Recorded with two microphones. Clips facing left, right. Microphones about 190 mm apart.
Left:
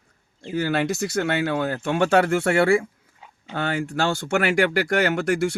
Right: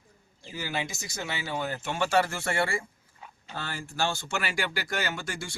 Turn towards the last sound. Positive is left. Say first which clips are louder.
# left 14 dB
turn(degrees=65)  # may be behind; listen again after turning